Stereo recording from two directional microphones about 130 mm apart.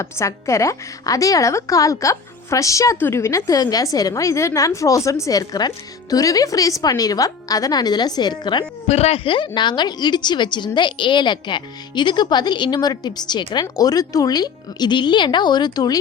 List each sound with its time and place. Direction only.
0.0 s a woman's voice: 20° left (ahead or behind)
8.9 s a woman's voice: 50° left (ahead or behind); by 16.0 s 30° left (ahead or behind)